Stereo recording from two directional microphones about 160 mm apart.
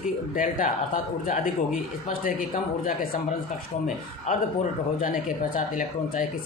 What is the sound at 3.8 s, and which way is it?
Speech, 50° left (ahead or behind).